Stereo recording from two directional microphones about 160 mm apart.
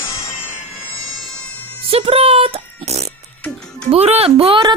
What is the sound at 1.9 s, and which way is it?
Oink, 35° right (ahead or behind).